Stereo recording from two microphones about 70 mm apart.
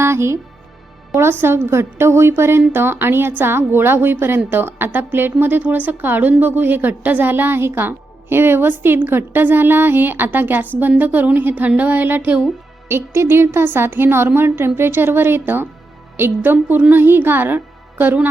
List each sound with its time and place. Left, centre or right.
0.0 s a woman's voice: right
12.9 s a woman's voice: right